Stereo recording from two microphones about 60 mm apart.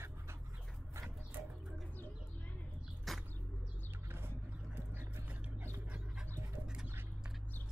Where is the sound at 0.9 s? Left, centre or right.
Right.